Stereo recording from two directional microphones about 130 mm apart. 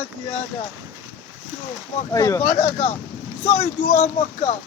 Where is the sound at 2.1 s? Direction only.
20° left (ahead or behind).